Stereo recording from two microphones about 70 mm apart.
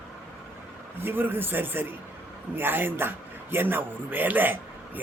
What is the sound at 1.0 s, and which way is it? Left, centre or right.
A man's voice, right.